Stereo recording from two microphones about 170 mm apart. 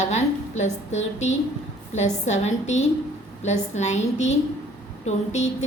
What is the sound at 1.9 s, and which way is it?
A woman's voice, 45° left (ahead or behind).